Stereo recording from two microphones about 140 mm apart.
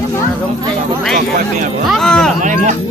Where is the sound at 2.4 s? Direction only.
60° right (ahead or behind).